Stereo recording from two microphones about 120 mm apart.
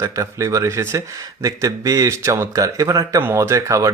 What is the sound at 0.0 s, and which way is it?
Speech, 25° right (ahead or behind).